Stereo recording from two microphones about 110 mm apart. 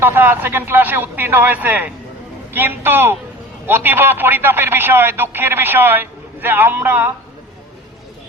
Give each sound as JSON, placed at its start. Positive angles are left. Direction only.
{"t": 0.0, "sound": "a man's voice", "side_deg": -20}